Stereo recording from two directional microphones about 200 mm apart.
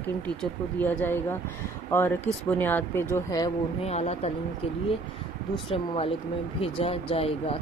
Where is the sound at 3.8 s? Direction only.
35° left (ahead or behind).